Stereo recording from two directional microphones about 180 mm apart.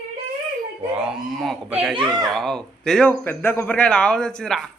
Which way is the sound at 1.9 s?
25° right (ahead or behind).